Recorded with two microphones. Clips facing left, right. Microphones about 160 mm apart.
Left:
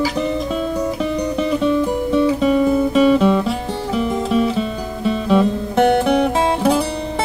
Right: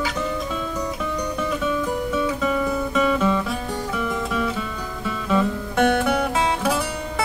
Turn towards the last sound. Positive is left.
turn(degrees=35)  # may be behind; listen again after turning